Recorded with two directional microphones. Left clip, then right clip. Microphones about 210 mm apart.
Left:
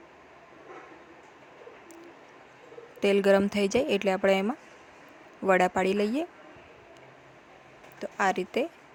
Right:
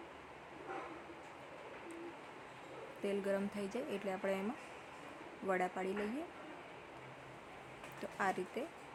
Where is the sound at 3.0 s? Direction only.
45° left (ahead or behind).